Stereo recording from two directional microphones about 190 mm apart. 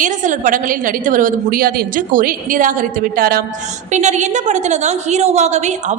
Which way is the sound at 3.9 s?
40° right (ahead or behind).